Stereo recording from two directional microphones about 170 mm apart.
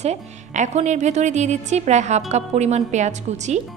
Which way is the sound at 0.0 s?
40° right (ahead or behind).